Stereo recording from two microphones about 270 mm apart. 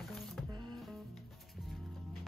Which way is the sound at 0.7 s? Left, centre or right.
Centre.